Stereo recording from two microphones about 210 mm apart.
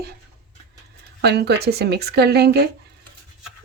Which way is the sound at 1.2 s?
50° right (ahead or behind).